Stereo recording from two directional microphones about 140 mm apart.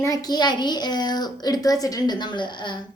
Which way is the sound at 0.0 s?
25° left (ahead or behind).